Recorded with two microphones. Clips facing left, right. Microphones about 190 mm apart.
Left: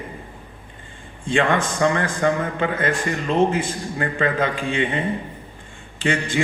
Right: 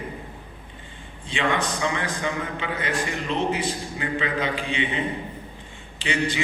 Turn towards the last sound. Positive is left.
turn(degrees=50)  # may be behind; listen again after turning